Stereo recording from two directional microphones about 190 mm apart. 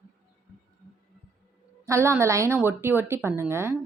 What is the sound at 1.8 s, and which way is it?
Speech, 15° right (ahead or behind).